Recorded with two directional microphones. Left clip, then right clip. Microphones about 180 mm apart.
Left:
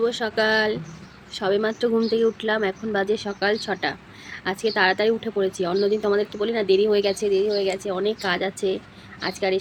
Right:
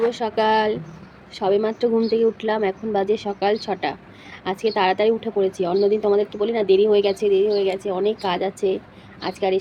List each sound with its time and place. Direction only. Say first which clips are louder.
0.1 s speech: right 2 dB; 25° left (ahead or behind)